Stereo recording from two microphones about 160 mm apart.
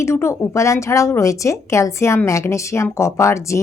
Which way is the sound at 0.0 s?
15° left (ahead or behind).